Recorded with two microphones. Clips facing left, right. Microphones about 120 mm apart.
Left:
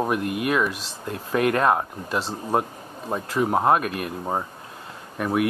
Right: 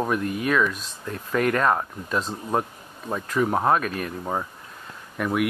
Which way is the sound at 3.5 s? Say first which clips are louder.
Left 3 dB; 10° left (ahead or behind).